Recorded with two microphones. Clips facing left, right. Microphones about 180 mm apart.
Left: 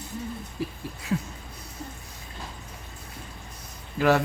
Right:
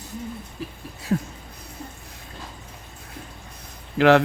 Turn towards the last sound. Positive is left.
turn(degrees=-70)  # may be behind; listen again after turning